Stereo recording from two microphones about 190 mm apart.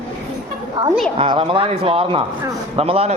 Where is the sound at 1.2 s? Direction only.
30° right (ahead or behind).